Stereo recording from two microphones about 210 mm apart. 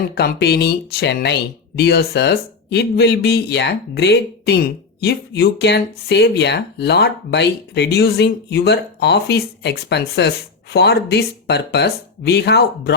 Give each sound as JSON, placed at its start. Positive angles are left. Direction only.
{"t": 0.1, "sound": "speech", "side_deg": 50}